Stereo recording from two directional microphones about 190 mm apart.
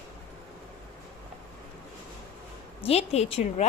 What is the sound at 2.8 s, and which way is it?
Speech, 35° left (ahead or behind).